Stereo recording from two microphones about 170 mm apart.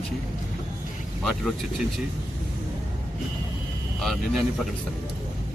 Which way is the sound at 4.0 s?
Centre (ahead or behind).